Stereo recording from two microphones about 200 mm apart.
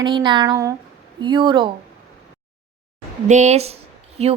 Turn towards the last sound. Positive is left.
turn(degrees=-30)  # may be behind; listen again after turning